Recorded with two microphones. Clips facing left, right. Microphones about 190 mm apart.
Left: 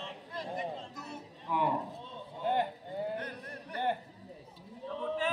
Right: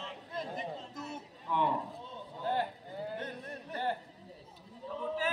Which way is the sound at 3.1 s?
25° right (ahead or behind).